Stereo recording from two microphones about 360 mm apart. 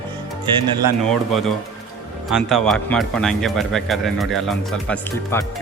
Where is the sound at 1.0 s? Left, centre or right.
Centre.